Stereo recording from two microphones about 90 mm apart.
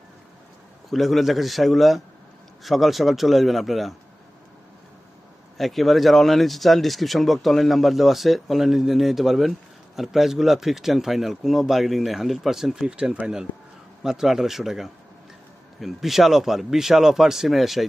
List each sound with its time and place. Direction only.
0.9 s speech: centre (ahead or behind)
5.5 s speech: centre (ahead or behind)